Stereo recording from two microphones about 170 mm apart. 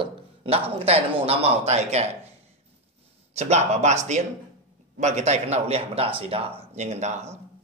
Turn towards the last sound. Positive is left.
turn(degrees=-40)  # may be behind; listen again after turning